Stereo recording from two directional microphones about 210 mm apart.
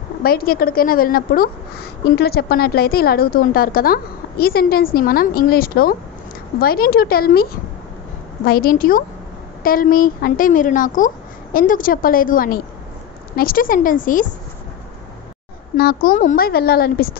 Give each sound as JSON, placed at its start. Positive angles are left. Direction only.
{"t": 0.2, "sound": "a woman's voice", "side_deg": 45}
{"t": 15.7, "sound": "a woman's voice", "side_deg": 45}